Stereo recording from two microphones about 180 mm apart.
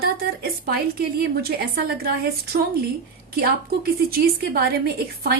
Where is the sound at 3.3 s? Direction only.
55° right (ahead or behind).